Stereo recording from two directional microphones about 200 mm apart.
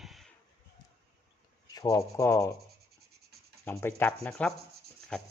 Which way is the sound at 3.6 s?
10° left (ahead or behind).